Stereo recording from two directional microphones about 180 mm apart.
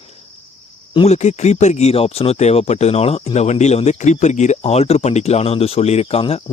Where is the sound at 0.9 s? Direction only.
35° left (ahead or behind).